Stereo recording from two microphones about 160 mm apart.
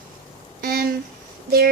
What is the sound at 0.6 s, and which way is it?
Speech, 70° right (ahead or behind).